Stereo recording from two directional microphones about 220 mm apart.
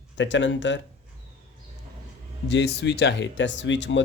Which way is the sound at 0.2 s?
55° left (ahead or behind).